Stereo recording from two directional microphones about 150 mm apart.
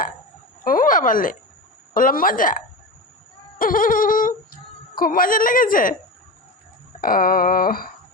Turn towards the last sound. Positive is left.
turn(degrees=80)